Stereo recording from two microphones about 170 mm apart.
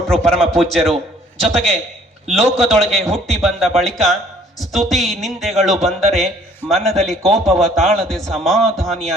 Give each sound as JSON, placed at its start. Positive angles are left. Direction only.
{"t": 0.3, "sound": "a man's voice", "side_deg": 5}